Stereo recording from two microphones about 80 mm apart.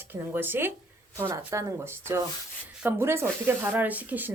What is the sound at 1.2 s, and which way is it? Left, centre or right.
Speech, right.